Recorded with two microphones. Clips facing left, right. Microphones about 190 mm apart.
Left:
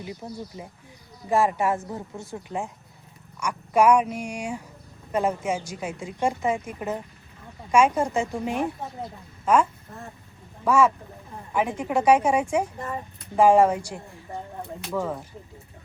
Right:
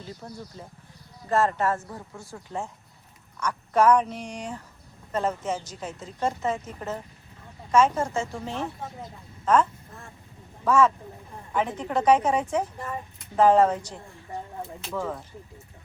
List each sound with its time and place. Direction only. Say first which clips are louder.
0.0 s a woman's voice: left 4 dB; 15° left (ahead or behind)
1.9 s a woman's voice: left 5 dB; 20° left (ahead or behind)